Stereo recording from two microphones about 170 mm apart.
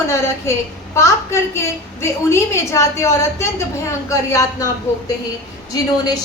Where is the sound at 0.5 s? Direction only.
15° left (ahead or behind).